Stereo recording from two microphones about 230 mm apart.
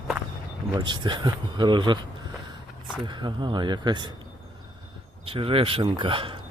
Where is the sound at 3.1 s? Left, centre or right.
Centre.